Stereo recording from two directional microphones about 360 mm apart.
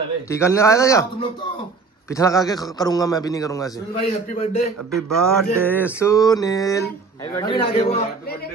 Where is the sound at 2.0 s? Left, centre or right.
Centre.